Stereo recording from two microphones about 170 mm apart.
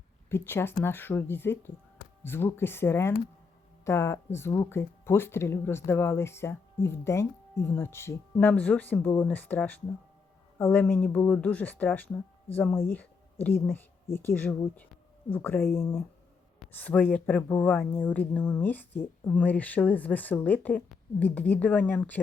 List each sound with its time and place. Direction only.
0.3 s speech: 15° left (ahead or behind)